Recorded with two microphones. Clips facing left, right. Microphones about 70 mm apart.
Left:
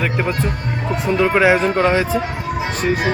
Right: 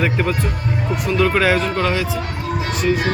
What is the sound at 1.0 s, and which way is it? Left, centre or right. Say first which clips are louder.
Speech: left 3 dB; left.